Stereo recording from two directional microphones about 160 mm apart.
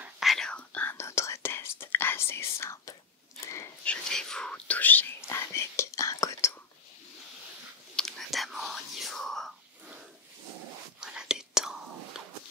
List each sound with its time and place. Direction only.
0.0 s whispering: centre (ahead or behind); by 3.0 s 20° left (ahead or behind)
3.4 s a sound: 15° left (ahead or behind)
3.8 s whispering: 5° left (ahead or behind)
7.9 s whispering: 5° left (ahead or behind)
11.0 s whispering: 5° right (ahead or behind)